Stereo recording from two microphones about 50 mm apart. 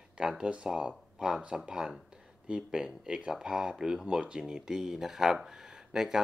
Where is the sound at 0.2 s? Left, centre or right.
Centre.